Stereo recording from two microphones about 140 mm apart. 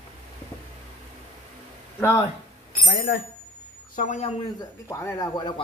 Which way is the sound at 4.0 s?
55° left (ahead or behind).